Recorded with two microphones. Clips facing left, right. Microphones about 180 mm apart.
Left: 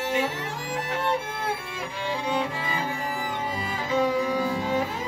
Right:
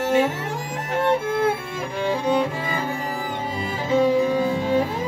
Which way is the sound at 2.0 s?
45° right (ahead or behind).